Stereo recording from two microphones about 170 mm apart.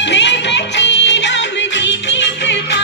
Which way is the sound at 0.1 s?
90° left.